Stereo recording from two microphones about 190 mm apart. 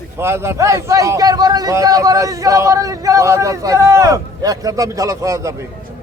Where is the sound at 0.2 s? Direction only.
15° right (ahead or behind).